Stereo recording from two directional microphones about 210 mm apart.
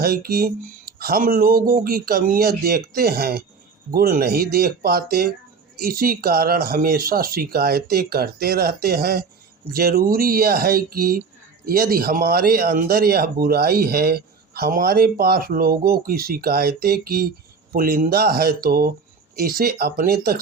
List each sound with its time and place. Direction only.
0.0 s speech: 45° right (ahead or behind)